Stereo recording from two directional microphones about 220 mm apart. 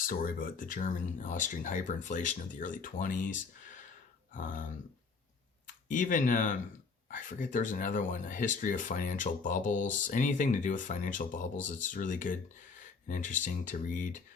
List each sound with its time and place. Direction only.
0.1 s speech: 40° left (ahead or behind)
5.6 s speech: 35° left (ahead or behind)